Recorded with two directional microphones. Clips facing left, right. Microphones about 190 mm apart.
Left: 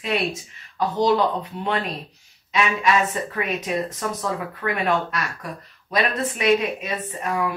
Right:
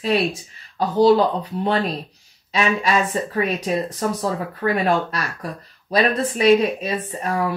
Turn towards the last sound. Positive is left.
turn(degrees=-35)  # may be behind; listen again after turning